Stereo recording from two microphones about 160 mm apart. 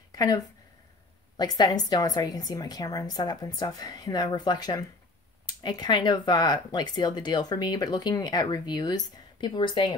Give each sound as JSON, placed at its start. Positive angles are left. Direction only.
{"t": 0.1, "sound": "speech", "side_deg": 25}